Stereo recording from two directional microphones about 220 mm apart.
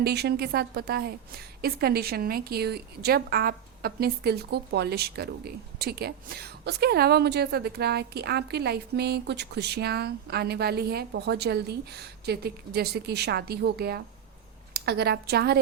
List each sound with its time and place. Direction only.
0.0 s a woman's voice: 50° right (ahead or behind)